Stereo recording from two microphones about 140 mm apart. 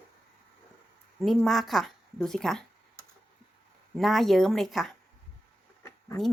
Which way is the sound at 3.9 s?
Centre (ahead or behind).